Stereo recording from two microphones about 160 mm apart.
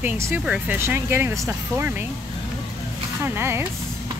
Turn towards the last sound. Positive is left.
turn(degrees=-15)  # may be behind; listen again after turning